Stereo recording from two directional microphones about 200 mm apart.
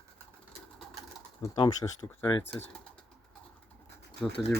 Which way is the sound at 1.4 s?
20° left (ahead or behind).